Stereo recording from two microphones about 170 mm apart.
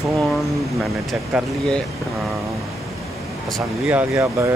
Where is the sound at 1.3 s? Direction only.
5° right (ahead or behind).